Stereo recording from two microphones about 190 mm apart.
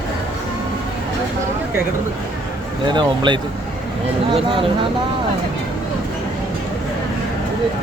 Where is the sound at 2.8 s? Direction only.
25° right (ahead or behind).